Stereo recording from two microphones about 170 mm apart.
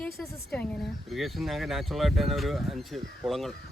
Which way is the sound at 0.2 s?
5° left (ahead or behind).